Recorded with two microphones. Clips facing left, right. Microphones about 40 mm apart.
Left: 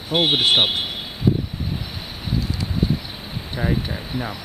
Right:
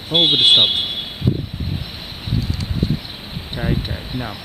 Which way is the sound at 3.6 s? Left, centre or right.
Centre.